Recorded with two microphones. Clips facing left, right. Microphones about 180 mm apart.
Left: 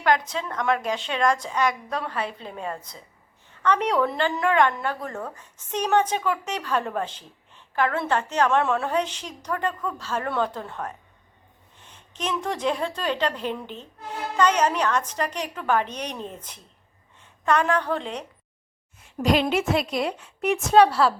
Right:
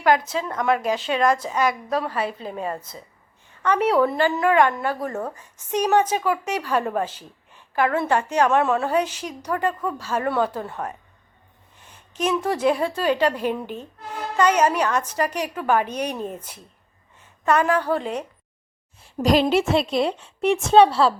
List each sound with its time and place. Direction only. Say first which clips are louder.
0.0 s a woman's voice: right 3 dB; 5° right (ahead or behind)
19.0 s a woman's voice: right 3 dB; 35° right (ahead or behind)